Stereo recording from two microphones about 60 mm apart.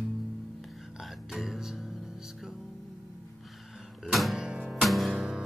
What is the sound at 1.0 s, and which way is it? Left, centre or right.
Music, centre.